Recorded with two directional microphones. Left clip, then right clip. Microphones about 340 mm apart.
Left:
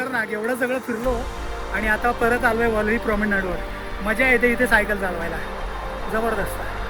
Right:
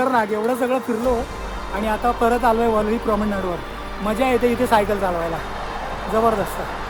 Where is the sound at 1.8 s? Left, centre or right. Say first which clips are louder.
Right 1 dB; centre.